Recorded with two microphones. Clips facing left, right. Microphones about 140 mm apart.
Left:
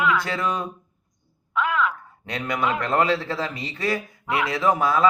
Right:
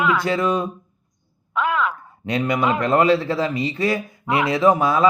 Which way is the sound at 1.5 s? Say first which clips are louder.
Right 2 dB; 35° right (ahead or behind).